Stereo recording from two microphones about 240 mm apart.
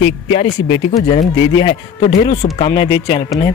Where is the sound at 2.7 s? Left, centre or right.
Centre.